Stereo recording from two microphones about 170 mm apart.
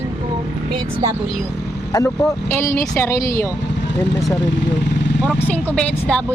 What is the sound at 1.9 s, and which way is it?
Speech, 20° left (ahead or behind).